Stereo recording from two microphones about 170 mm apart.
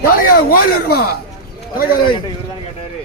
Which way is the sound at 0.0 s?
60° left (ahead or behind).